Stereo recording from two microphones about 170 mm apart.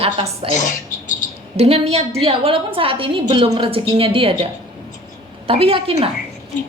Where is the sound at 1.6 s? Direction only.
35° right (ahead or behind).